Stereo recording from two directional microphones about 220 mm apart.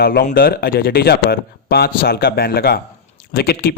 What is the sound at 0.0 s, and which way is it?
Speech, 45° left (ahead or behind).